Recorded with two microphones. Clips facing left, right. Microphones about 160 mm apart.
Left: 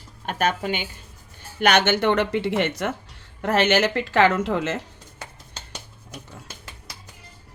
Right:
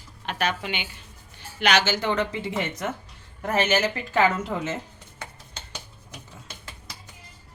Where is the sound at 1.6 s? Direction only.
55° left (ahead or behind); by 4.8 s 75° left (ahead or behind).